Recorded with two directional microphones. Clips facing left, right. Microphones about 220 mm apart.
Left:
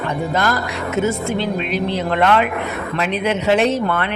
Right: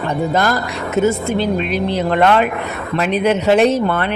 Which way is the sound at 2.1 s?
40° right (ahead or behind).